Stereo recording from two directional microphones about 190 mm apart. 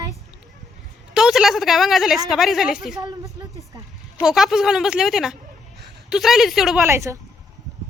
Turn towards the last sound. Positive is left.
turn(degrees=-15)  # may be behind; listen again after turning